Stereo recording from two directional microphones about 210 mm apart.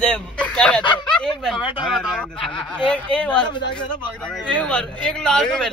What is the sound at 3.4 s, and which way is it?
Speech, 20° left (ahead or behind).